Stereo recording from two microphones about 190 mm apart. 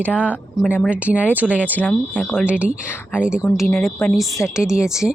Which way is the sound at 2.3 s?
5° right (ahead or behind).